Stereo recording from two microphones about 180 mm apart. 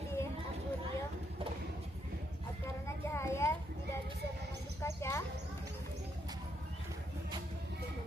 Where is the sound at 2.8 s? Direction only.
15° left (ahead or behind).